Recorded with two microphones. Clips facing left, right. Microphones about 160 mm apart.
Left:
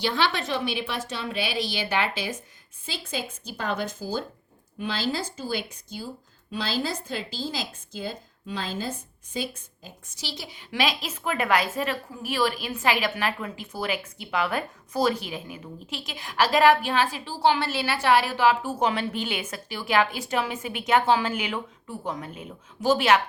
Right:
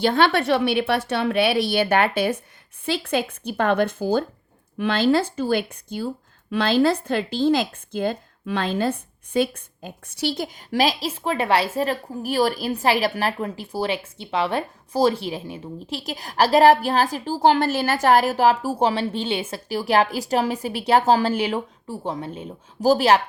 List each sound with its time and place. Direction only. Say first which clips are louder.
0.0 s a woman's voice: right 7 dB; 55° right (ahead or behind); by 23.2 s 35° right (ahead or behind)